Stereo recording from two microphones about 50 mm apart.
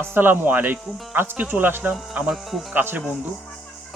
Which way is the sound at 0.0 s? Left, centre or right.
Right.